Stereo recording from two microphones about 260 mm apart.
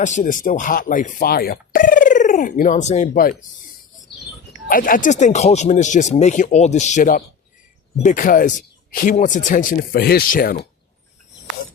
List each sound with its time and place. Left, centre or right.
0.0 s speech: left
4.7 s speech: left